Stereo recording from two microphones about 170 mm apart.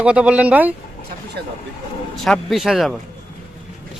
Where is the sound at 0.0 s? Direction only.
5° right (ahead or behind).